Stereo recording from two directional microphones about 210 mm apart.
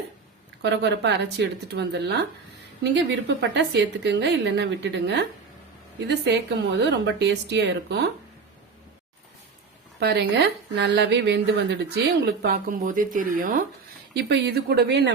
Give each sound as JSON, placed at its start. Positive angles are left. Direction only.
{"t": 0.6, "sound": "a woman's voice", "side_deg": -55}
{"t": 6.7, "sound": "a woman's voice", "side_deg": -55}
{"t": 10.0, "sound": "speech", "side_deg": -50}
{"t": 14.1, "sound": "speech", "side_deg": -55}